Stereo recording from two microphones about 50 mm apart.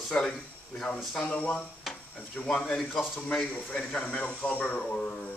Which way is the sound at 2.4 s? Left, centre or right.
Centre.